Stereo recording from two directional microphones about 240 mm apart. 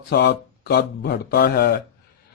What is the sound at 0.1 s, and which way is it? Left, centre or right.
A man's voice, left.